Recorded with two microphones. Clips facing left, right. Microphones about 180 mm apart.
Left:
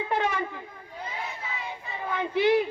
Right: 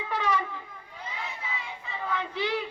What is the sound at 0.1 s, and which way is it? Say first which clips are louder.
Wind instrument: even; 50° left (ahead or behind).